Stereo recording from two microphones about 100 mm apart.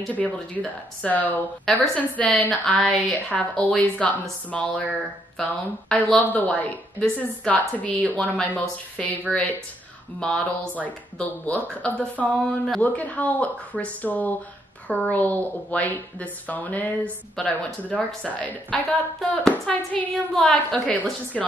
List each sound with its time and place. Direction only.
0.1 s a woman's voice: 15° left (ahead or behind)
2.5 s a woman's voice: 5° left (ahead or behind)